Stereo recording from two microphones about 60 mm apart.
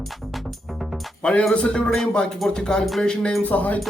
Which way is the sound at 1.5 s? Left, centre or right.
Centre.